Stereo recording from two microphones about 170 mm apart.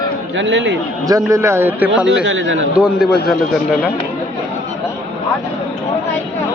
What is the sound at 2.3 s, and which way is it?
Speech, 90° right.